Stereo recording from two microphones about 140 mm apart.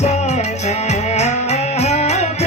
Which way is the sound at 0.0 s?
55° left (ahead or behind).